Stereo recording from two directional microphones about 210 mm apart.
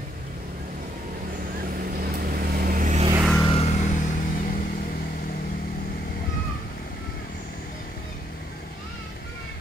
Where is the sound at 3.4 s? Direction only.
30° left (ahead or behind); by 5.5 s 45° left (ahead or behind).